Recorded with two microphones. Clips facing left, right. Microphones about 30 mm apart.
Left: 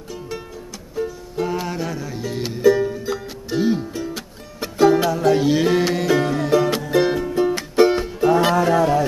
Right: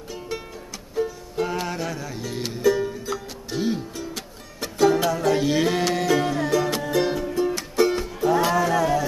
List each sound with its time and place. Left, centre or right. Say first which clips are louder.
1.3 s music: left 4 dB; centre
6.5 s music: left 7 dB; centre